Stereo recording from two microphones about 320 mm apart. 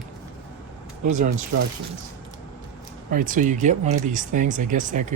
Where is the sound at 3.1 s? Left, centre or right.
Right.